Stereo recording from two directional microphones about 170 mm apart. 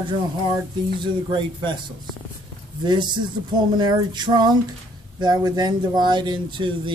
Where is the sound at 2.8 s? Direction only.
25° right (ahead or behind).